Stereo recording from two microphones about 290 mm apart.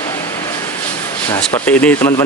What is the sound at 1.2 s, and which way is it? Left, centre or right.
Speech, centre.